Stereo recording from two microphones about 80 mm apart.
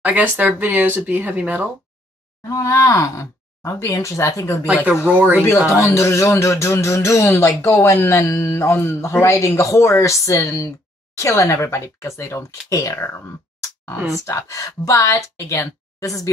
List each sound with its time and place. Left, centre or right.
0.0 s speech: centre
2.4 s a man's voice: left
4.6 s speech: centre
5.7 s a man's voice: left